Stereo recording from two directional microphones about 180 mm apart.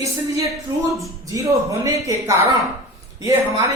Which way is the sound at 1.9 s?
20° right (ahead or behind).